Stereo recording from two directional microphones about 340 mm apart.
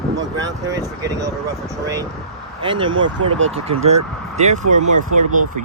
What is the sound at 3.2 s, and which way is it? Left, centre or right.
Speech, right.